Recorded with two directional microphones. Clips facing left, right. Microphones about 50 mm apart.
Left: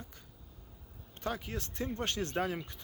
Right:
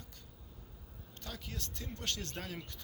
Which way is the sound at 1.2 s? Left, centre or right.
Left.